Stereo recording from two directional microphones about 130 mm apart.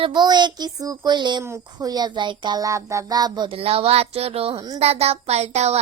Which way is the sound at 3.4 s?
50° right (ahead or behind).